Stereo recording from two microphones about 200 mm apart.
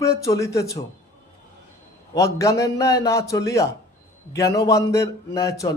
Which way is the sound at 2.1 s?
15° left (ahead or behind).